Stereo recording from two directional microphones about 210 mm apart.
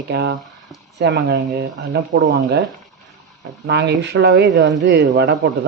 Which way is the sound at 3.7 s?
50° right (ahead or behind).